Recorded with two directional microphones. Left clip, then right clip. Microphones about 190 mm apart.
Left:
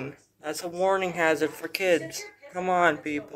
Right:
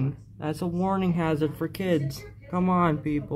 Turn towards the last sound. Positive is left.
turn(degrees=0)  # may be behind; listen again after turning